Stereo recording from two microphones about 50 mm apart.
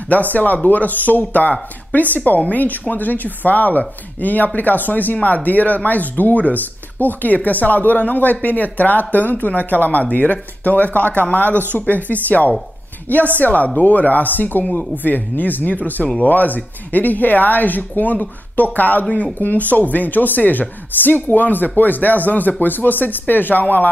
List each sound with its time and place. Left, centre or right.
0.1 s speech: left